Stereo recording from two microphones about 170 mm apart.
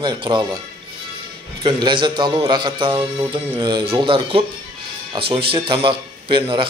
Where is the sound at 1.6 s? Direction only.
30° right (ahead or behind).